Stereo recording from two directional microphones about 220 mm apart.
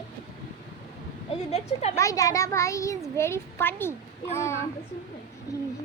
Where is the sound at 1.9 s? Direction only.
15° left (ahead or behind).